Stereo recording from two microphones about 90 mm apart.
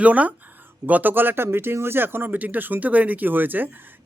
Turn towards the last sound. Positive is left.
turn(degrees=-20)  # may be behind; listen again after turning